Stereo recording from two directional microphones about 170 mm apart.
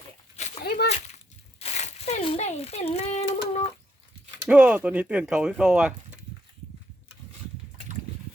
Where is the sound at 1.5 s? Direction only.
40° left (ahead or behind).